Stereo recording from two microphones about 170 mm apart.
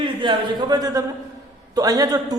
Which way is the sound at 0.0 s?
30° right (ahead or behind).